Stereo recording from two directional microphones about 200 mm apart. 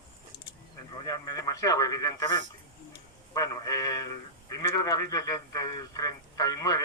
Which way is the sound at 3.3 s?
15° left (ahead or behind).